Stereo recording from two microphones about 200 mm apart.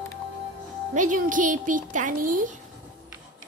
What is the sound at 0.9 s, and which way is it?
Speech, 40° right (ahead or behind).